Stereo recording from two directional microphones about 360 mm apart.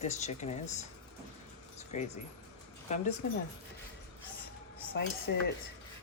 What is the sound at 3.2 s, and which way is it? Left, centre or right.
Speech, left.